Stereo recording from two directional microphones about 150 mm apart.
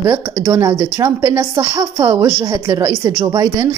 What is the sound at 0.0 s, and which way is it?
Speech, 25° right (ahead or behind).